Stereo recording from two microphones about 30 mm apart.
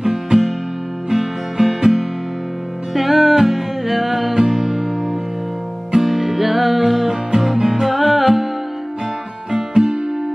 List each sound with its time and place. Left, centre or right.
0.0 s music: centre
5.9 s music: centre
9.5 s music: centre